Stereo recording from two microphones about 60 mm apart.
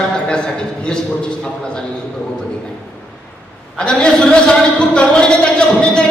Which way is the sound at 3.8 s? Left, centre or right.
Centre.